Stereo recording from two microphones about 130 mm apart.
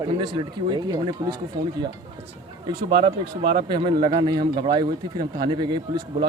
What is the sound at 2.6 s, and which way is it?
Speech, 40° right (ahead or behind).